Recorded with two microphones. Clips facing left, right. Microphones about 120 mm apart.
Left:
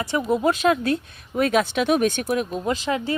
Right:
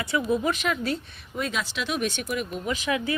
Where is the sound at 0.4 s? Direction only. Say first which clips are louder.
Left 7 dB; 45° left (ahead or behind).